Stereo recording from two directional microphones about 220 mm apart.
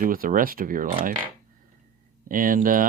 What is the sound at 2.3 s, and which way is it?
Speech, 40° right (ahead or behind).